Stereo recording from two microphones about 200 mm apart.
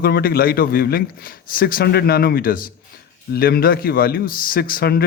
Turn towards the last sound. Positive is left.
turn(degrees=50)  # may be behind; listen again after turning